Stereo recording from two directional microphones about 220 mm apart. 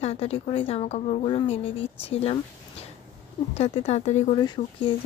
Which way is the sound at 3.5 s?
30° left (ahead or behind).